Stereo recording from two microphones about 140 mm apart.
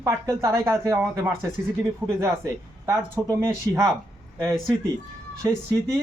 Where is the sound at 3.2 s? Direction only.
15° right (ahead or behind).